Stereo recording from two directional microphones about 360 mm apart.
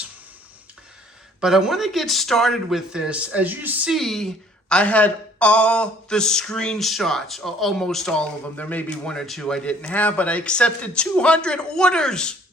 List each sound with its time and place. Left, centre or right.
1.4 s speech: centre